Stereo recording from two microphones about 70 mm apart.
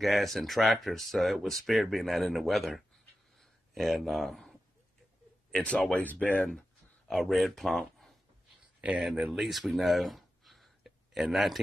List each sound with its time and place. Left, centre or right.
0.0 s speech: centre
5.7 s speech: centre
6.2 s speech: left
7.1 s speech: centre
9.0 s speech: centre